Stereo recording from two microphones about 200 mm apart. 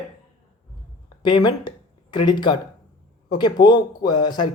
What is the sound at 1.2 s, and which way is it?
Speech, 20° left (ahead or behind).